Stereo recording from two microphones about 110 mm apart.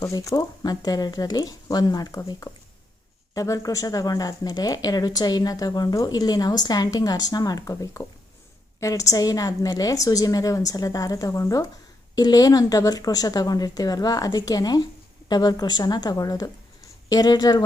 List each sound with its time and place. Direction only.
0.1 s speech: 30° left (ahead or behind)